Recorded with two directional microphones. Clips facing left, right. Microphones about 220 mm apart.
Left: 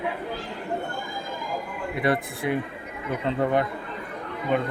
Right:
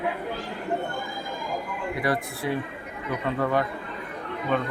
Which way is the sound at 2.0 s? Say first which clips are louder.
Left 3 dB; 25° left (ahead or behind).